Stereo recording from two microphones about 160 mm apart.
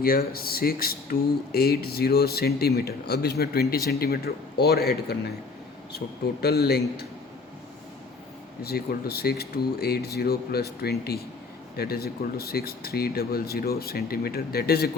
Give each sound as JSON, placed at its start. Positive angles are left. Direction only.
{"t": 0.0, "sound": "speech", "side_deg": 70}
{"t": 6.4, "sound": "a man's voice", "side_deg": 80}
{"t": 8.6, "sound": "speech", "side_deg": 75}